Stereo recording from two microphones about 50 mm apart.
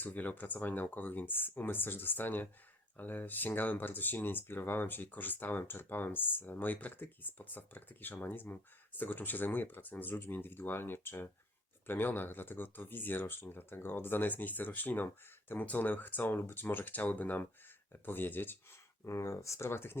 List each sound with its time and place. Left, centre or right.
0.0 s speech: left
19.0 s speech: left